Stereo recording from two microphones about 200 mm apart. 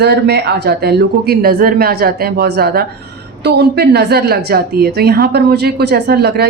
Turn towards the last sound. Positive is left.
turn(degrees=-55)  # may be behind; listen again after turning